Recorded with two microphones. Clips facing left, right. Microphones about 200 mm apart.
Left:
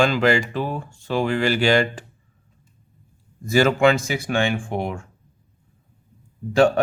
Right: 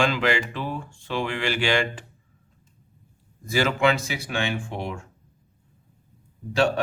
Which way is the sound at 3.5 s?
45° left (ahead or behind).